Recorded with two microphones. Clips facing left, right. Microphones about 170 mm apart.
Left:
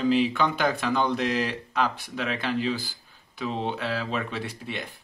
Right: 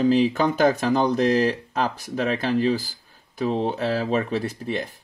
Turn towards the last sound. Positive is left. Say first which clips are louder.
# right 7 dB
turn(degrees=-40)  # may be behind; listen again after turning